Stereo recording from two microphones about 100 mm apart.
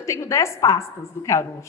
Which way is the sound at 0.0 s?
30° left (ahead or behind).